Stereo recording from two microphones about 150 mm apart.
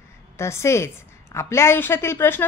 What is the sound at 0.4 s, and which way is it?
A woman's voice, 20° left (ahead or behind).